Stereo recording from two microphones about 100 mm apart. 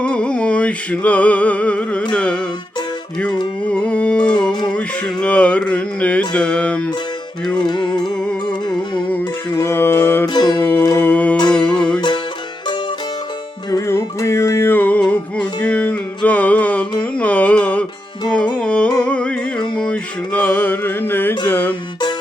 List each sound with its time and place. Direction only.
0.0 s music: 10° left (ahead or behind)
3.7 s a sound: 15° left (ahead or behind)
4.7 s music: 10° left (ahead or behind)
7.5 s music: 55° left (ahead or behind)
9.6 s music: 25° left (ahead or behind)
10.2 s music: 45° left (ahead or behind)
10.6 s music: 20° left (ahead or behind)
11.9 s music: 50° left (ahead or behind)
13.7 s music: 35° left (ahead or behind); by 17.8 s 15° left (ahead or behind)
18.6 s carnatic music: 10° left (ahead or behind)
19.7 s music: 10° left (ahead or behind)